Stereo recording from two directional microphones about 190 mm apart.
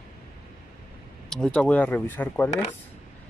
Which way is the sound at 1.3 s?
5° left (ahead or behind).